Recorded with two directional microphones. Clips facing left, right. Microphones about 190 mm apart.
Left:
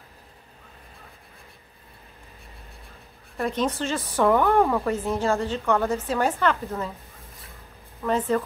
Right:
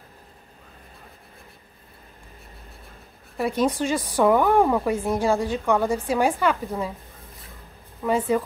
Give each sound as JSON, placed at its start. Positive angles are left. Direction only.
{"t": 3.3, "sound": "a woman's voice", "side_deg": -10}
{"t": 8.0, "sound": "a woman's voice", "side_deg": -10}